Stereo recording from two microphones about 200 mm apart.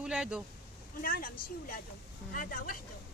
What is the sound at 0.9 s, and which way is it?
Speech, 45° left (ahead or behind).